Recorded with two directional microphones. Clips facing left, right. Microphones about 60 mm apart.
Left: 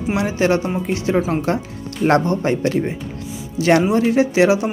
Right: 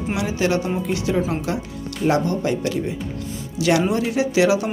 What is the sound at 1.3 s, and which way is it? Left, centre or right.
Speech, left.